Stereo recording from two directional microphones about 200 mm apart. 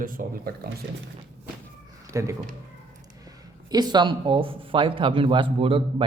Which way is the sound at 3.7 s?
20° right (ahead or behind).